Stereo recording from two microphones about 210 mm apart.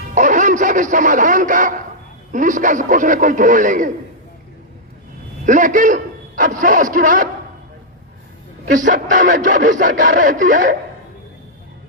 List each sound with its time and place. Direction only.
0.1 s a sound: 35° right (ahead or behind)
2.3 s a man's voice: 35° right (ahead or behind)
5.5 s a man's voice: 40° right (ahead or behind)
8.7 s a man's voice: 40° right (ahead or behind)